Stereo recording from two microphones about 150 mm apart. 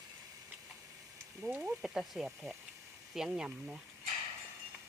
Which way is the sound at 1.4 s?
10° right (ahead or behind).